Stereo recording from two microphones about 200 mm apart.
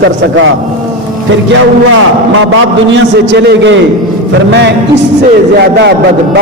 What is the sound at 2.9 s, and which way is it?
A man's voice, 60° right (ahead or behind).